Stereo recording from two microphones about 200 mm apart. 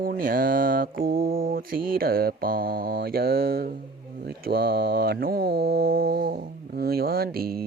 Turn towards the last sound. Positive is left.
turn(degrees=-50)  # may be behind; listen again after turning